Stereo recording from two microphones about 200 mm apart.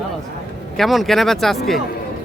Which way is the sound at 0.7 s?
Centre (ahead or behind).